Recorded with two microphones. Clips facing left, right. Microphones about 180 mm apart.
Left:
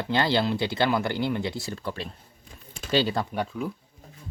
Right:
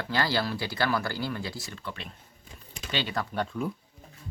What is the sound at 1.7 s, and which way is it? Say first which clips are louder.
Speech: left 6 dB; 40° left (ahead or behind).